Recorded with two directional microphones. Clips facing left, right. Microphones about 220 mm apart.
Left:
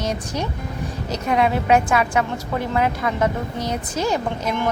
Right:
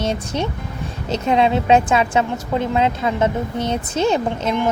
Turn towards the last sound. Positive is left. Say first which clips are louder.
# right 3 dB
turn(degrees=-25)  # may be behind; listen again after turning